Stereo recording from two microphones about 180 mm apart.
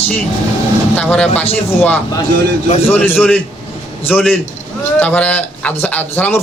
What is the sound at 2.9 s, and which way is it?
Speech, 10° left (ahead or behind).